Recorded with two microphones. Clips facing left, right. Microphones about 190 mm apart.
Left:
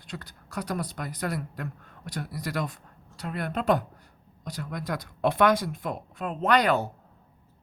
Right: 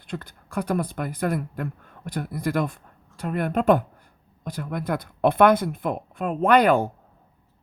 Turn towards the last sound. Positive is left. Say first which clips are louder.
# right 5 dB
turn(degrees=-50)  # may be behind; listen again after turning